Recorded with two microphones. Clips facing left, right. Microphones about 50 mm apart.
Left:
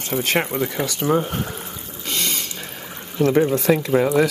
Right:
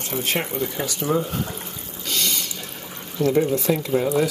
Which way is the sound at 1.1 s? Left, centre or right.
Left.